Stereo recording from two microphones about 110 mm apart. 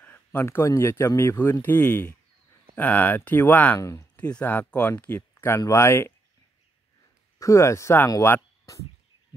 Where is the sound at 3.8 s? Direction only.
30° left (ahead or behind).